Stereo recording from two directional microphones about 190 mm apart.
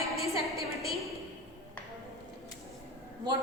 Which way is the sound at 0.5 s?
Centre (ahead or behind).